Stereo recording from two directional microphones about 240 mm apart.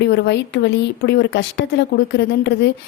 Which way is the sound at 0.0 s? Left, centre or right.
Left.